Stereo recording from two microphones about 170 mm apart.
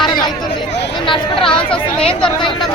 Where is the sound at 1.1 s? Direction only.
30° left (ahead or behind).